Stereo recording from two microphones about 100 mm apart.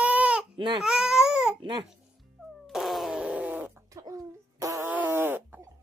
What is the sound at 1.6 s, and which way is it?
Babbling, 50° right (ahead or behind).